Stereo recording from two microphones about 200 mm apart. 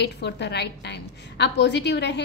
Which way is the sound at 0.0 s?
55° left (ahead or behind).